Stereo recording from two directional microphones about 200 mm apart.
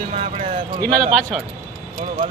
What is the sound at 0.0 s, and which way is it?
Speech, 30° right (ahead or behind).